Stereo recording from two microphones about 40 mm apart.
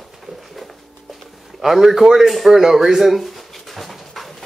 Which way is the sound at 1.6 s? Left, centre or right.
Centre.